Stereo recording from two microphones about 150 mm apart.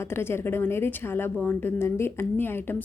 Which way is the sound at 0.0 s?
15° left (ahead or behind).